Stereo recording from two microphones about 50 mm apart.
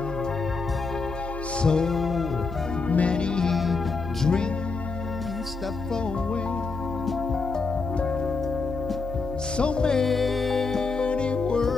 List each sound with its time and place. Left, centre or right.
1.6 s music: centre
2.0 s music: centre
2.9 s music: left
3.5 s music: centre
4.2 s music: centre
9.6 s music: centre
10.0 s music: centre
11.1 s music: left